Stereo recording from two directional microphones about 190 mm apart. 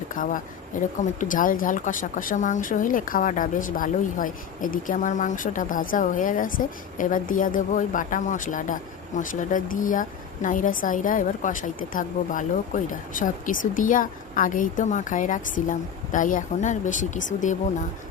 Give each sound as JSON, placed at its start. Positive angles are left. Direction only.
{"t": 0.1, "sound": "a woman's voice", "side_deg": 45}